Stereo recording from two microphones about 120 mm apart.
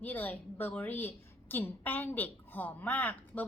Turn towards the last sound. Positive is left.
turn(degrees=15)  # may be behind; listen again after turning